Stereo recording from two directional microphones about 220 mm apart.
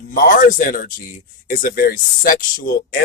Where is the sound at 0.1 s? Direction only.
40° left (ahead or behind).